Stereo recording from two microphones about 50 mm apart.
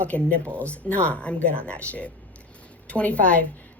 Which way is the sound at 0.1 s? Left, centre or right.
Left.